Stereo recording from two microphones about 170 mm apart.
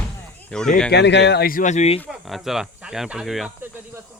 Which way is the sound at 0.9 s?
90° left.